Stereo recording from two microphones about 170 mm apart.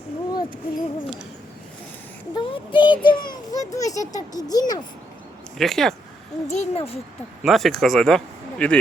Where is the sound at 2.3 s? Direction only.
30° left (ahead or behind).